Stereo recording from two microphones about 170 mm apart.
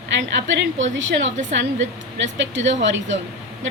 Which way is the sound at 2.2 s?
90° right.